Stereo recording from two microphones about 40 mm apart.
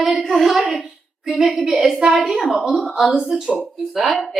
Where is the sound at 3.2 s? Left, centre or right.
Centre.